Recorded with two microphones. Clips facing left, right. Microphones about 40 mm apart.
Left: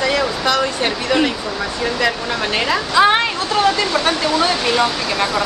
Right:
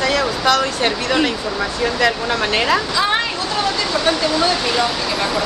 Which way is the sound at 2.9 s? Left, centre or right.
Left.